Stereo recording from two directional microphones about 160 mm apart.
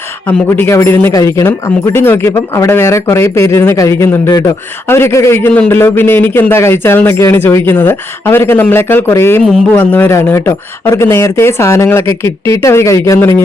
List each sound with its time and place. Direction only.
0.3 s a man's voice: 15° left (ahead or behind)